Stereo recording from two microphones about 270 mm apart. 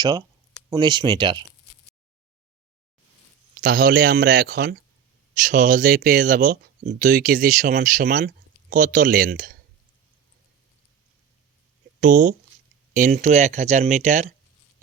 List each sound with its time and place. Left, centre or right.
0.0 s speech: centre
3.6 s speech: right
11.9 s speech: right